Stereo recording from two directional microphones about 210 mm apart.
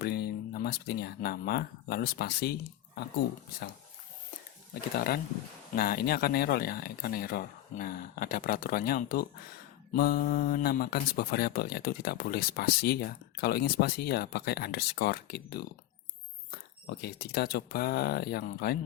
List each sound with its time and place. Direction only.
0.0 s speech: 50° left (ahead or behind)
4.7 s speech: 45° left (ahead or behind)